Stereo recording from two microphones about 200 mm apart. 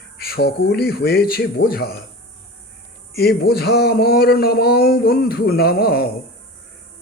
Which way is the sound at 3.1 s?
50° left (ahead or behind).